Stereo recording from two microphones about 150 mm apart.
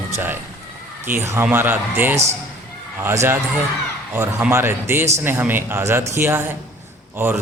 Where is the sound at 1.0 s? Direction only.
15° right (ahead or behind).